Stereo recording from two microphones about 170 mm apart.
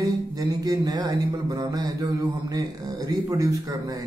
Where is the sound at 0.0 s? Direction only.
20° right (ahead or behind).